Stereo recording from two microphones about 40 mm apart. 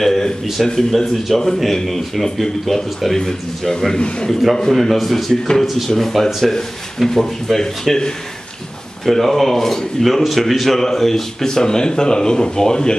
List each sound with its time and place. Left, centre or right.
0.0 s a man's voice: centre
4.3 s a man's voice: centre